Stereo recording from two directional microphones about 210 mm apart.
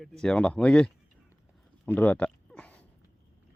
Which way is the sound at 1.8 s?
10° left (ahead or behind).